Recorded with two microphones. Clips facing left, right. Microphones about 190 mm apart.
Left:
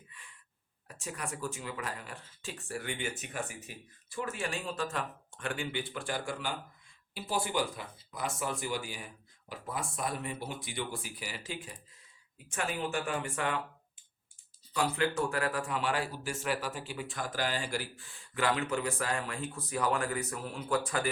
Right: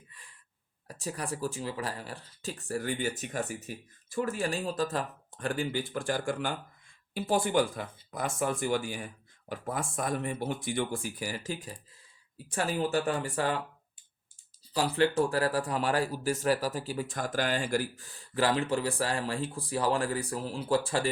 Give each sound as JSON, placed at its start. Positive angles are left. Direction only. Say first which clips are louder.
{"t": 0.1, "sound": "gasp", "louder": "left 1 dB", "side_deg": -35}
{"t": 0.9, "sound": "speech", "louder": "right 5 dB", "side_deg": -35}
{"t": 14.7, "sound": "speech", "louder": "right 4 dB", "side_deg": -35}